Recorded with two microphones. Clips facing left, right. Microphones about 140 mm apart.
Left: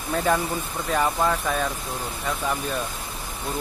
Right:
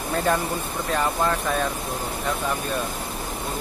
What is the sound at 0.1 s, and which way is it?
Speech, centre (ahead or behind).